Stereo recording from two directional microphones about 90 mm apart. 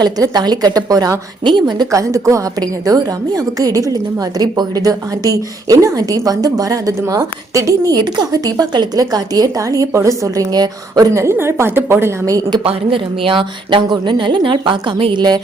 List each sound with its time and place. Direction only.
0.0 s a woman's voice: 50° right (ahead or behind)
1.5 s a woman's voice: 55° right (ahead or behind)
1.9 s a woman's voice: 35° right (ahead or behind)
8.0 s a woman's voice: 50° right (ahead or behind); by 12.1 s 25° right (ahead or behind)
12.2 s a woman's voice: 45° right (ahead or behind)
12.6 s a woman's voice: 80° right